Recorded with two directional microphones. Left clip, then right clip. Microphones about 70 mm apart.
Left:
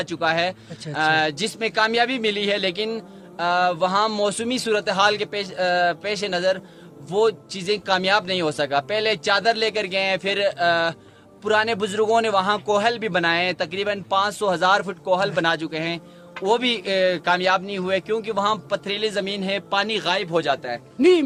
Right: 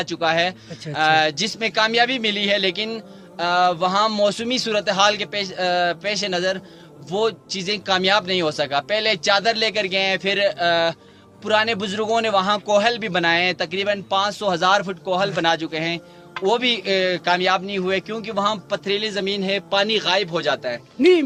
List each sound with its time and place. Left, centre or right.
0.0 s a man's voice: left
16.4 s speech: left
18.4 s a man's voice: left